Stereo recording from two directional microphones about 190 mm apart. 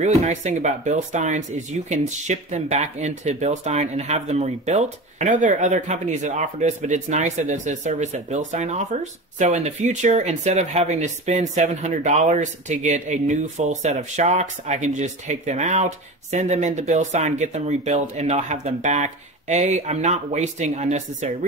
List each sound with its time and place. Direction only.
0.0 s speech: 40° right (ahead or behind)